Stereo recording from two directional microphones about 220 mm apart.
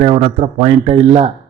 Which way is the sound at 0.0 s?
25° right (ahead or behind).